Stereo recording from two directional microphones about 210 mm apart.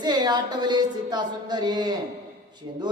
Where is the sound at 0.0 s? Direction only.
20° right (ahead or behind).